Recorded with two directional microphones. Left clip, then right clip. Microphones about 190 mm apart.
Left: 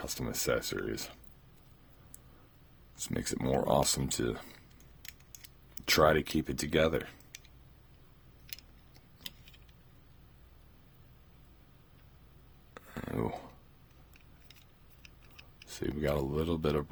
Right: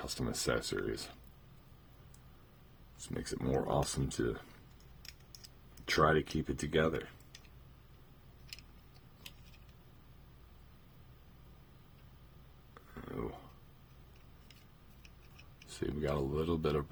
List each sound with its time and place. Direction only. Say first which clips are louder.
0.0 s speech: left 2 dB; 30° left (ahead or behind)
3.1 s speech: left 4 dB; 45° left (ahead or behind)
5.8 s speech: left 4 dB; 45° left (ahead or behind)
12.7 s a sound: left 6 dB; 55° left (ahead or behind)
15.7 s speech: left 4 dB; 30° left (ahead or behind)